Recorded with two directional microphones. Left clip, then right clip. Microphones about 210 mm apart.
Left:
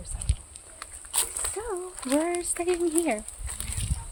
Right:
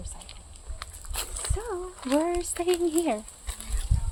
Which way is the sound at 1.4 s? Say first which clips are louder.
Left 1 dB; 10° right (ahead or behind).